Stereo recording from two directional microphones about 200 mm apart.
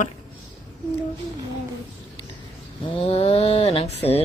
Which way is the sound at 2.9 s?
30° left (ahead or behind).